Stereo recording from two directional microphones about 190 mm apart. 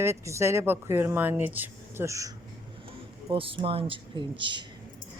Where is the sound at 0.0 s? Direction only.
15° right (ahead or behind).